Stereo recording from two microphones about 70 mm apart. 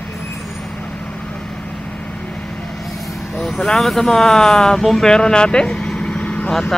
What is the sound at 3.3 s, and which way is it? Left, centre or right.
Speech, centre.